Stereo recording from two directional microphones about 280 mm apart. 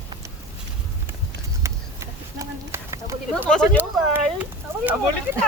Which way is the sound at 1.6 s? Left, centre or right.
Centre.